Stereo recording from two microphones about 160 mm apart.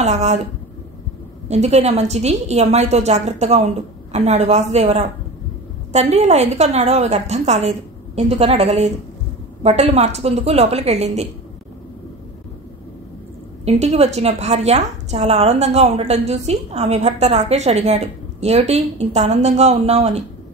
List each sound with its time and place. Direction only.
0.0 s a woman's voice: 45° right (ahead or behind)
1.5 s a woman's voice: 45° right (ahead or behind)
13.7 s a woman's voice: 40° right (ahead or behind)